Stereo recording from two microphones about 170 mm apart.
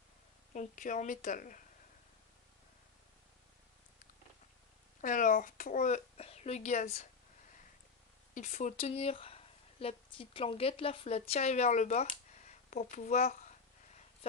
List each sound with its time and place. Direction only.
0.5 s a child's voice: 50° left (ahead or behind)
5.0 s a child's voice: 50° left (ahead or behind)
8.4 s speech: 45° left (ahead or behind)
12.4 s a sound: 45° left (ahead or behind)
12.9 s a child's voice: 45° left (ahead or behind)